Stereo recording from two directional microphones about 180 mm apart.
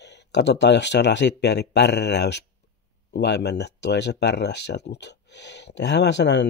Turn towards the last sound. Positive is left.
turn(degrees=80)